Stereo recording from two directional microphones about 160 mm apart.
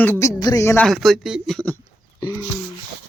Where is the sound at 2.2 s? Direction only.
25° left (ahead or behind).